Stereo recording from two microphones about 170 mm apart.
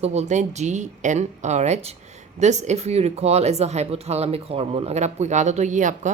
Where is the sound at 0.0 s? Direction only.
40° right (ahead or behind).